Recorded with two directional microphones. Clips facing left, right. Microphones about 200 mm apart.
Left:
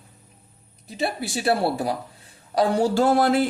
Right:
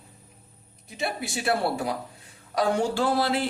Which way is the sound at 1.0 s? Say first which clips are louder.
Left 4 dB; 35° left (ahead or behind).